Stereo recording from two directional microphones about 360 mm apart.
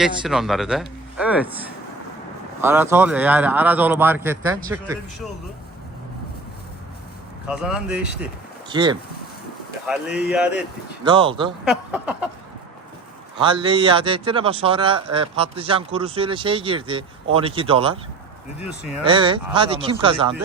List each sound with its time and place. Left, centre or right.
0.0 s speech: centre
7.4 s a man's voice: centre
13.3 s a man's voice: centre
19.0 s a man's voice: centre